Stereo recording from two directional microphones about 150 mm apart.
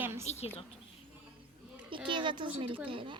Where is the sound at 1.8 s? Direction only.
35° right (ahead or behind).